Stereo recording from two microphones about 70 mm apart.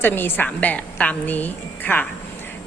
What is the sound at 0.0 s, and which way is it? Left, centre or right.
A woman's voice, left.